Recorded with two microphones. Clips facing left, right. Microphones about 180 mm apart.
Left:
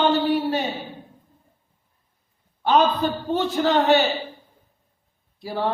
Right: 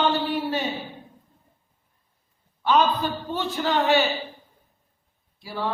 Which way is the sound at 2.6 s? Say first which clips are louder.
Left 2 dB; 50° left (ahead or behind).